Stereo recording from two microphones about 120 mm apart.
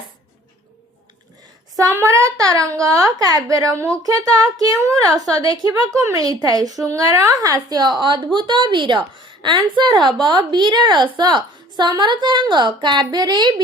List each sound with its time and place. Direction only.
1.7 s a woman's voice: 25° right (ahead or behind)